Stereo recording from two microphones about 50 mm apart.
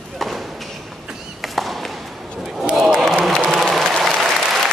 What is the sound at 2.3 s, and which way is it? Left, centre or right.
Battle cry, centre.